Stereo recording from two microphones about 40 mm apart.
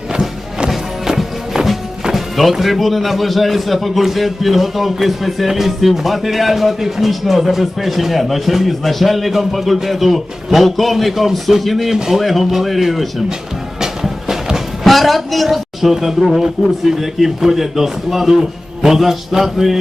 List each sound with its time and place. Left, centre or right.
0.1 s music: centre
2.1 s speech: centre
13.7 s music: centre
14.8 s a woman's voice: centre